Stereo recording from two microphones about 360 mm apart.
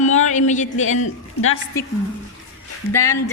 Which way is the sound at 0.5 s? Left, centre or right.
Centre.